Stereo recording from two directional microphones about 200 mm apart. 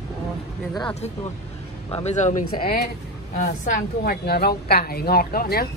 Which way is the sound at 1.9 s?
35° left (ahead or behind).